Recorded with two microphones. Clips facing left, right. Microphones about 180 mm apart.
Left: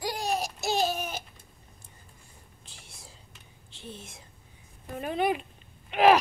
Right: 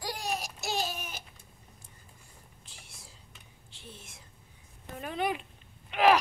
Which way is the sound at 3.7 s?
25° left (ahead or behind).